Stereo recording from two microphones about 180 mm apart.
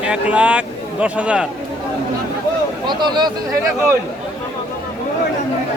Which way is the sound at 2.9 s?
25° right (ahead or behind).